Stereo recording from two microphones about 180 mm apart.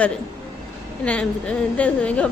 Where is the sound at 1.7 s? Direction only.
5° left (ahead or behind).